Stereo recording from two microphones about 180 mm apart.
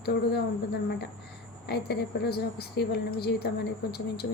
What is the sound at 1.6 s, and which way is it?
A woman's voice, 65° left (ahead or behind).